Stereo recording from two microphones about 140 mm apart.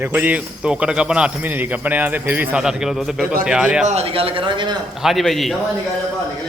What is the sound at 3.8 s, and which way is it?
Speech, 50° right (ahead or behind).